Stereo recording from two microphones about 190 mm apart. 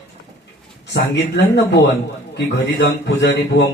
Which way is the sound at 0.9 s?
65° left (ahead or behind).